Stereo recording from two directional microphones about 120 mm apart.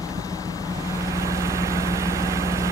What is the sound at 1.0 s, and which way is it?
Vehicle, 25° right (ahead or behind).